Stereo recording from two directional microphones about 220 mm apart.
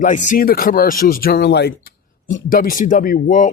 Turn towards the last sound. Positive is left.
turn(degrees=35)  # may be behind; listen again after turning